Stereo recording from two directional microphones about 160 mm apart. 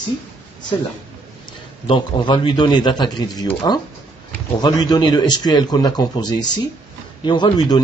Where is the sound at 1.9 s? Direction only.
30° left (ahead or behind).